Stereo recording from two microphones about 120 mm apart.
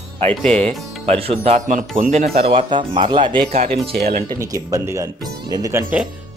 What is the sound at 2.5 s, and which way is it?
Speech, 45° right (ahead or behind).